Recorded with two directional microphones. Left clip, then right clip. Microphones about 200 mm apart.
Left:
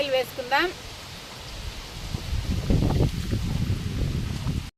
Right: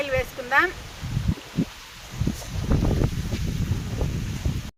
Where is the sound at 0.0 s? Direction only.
15° left (ahead or behind).